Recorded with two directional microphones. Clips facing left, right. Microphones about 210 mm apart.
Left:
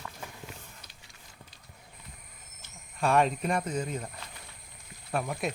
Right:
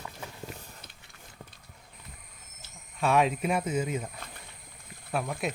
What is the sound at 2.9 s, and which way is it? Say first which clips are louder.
Speech: even; centre (ahead or behind).